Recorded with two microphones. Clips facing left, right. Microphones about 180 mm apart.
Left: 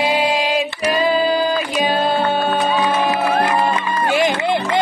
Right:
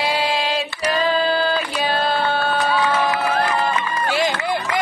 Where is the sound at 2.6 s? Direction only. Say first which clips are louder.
Left 2 dB; 20° left (ahead or behind).